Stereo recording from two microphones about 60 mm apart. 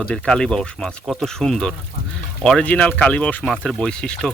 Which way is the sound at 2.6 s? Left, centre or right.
Left.